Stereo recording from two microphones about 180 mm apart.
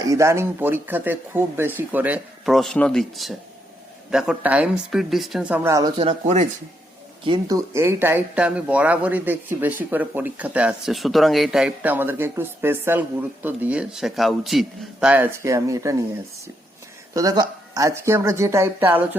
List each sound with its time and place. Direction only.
0.0 s a woman's voice: 15° right (ahead or behind)
6.0 s speech: 40° right (ahead or behind)
7.3 s speech: 20° right (ahead or behind)
17.2 s speech: 20° right (ahead or behind)